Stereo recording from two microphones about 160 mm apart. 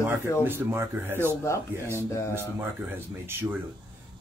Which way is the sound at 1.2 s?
15° left (ahead or behind).